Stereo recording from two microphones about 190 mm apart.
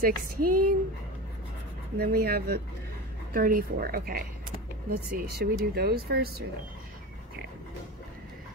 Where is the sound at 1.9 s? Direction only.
55° right (ahead or behind).